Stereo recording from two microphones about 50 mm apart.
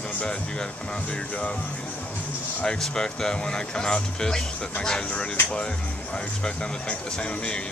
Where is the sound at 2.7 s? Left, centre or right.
Centre.